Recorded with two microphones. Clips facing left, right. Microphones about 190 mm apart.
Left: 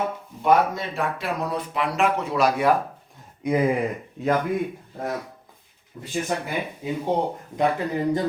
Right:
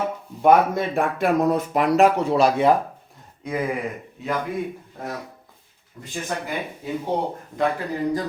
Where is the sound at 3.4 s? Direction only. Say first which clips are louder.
Left 5 dB; 15° left (ahead or behind).